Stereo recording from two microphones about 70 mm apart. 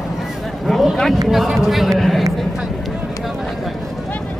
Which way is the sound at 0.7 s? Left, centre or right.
Centre.